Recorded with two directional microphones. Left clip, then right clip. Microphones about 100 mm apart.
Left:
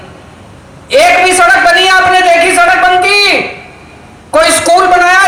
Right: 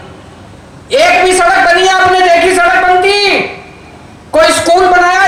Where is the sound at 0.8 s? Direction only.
25° left (ahead or behind).